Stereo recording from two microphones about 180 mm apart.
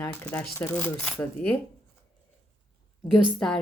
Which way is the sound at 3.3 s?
5° left (ahead or behind).